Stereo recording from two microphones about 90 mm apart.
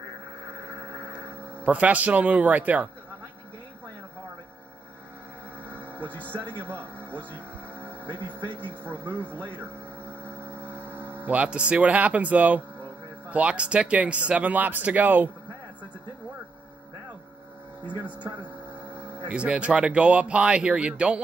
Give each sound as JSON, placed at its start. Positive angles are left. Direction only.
{"t": 1.0, "sound": "a sound", "side_deg": -25}
{"t": 1.6, "sound": "speech", "side_deg": -15}
{"t": 5.6, "sound": "a sound", "side_deg": 15}
{"t": 6.3, "sound": "a man's voice", "side_deg": 15}
{"t": 6.6, "sound": "speech", "side_deg": -25}
{"t": 7.0, "sound": "a sound", "side_deg": 15}
{"t": 8.5, "sound": "a man's voice", "side_deg": 15}
{"t": 10.0, "sound": "vehicle", "side_deg": 15}
{"t": 11.1, "sound": "speech", "side_deg": -15}
{"t": 18.2, "sound": "speech", "side_deg": -15}